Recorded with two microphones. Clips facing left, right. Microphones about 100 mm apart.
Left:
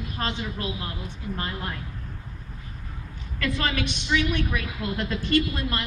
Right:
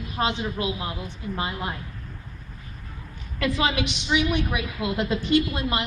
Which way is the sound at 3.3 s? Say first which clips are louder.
Right 3 dB; 15° right (ahead or behind).